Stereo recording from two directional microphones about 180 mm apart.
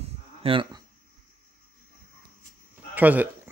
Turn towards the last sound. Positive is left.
turn(degrees=-10)  # may be behind; listen again after turning